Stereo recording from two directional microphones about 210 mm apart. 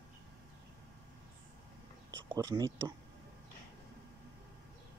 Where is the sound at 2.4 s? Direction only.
15° right (ahead or behind).